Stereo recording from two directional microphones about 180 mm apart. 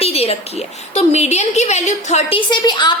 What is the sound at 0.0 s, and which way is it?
A woman's voice, 35° left (ahead or behind).